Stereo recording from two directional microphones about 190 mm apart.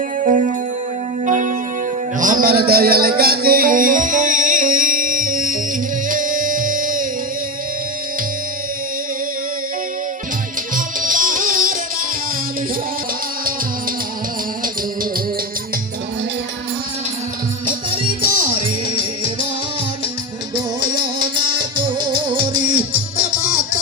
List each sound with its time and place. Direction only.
0.2 s music: 40° right (ahead or behind)
2.1 s a man's voice: 45° right (ahead or behind)
6.1 s music: 45° right (ahead or behind)
10.8 s music: 45° right (ahead or behind)
22.0 s music: 25° right (ahead or behind)